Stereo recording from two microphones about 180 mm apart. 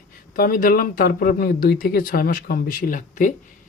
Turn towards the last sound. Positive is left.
turn(degrees=45)  # may be behind; listen again after turning